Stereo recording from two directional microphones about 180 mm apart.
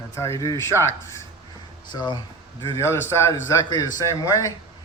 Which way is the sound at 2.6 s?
15° left (ahead or behind).